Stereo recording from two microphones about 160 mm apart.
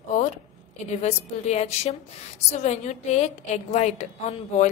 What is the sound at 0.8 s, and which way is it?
A woman's voice, 45° left (ahead or behind).